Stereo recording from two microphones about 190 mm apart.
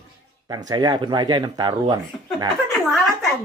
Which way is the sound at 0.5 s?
20° right (ahead or behind).